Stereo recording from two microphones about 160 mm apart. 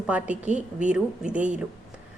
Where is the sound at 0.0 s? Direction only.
10° right (ahead or behind).